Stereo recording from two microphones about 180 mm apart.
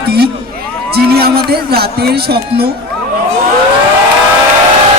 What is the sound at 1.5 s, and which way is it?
A man's voice, 60° right (ahead or behind).